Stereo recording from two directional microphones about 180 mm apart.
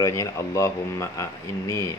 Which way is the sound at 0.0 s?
15° left (ahead or behind).